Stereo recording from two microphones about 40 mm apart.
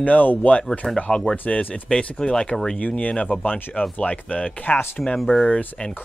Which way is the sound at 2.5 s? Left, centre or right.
Centre.